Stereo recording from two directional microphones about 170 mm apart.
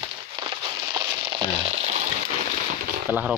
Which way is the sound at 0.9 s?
25° right (ahead or behind).